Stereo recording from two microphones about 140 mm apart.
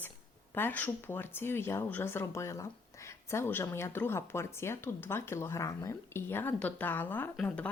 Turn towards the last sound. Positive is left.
turn(degrees=5)  # may be behind; listen again after turning